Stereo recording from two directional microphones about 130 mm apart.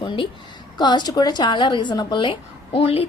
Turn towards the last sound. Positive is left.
turn(degrees=50)  # may be behind; listen again after turning